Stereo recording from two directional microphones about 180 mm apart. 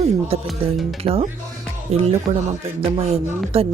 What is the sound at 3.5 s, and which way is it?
Speech, 30° right (ahead or behind).